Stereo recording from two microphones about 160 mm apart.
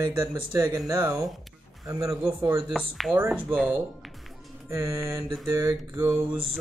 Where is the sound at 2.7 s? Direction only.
Centre (ahead or behind).